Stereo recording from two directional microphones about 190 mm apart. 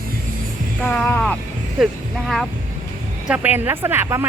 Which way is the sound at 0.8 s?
5° left (ahead or behind).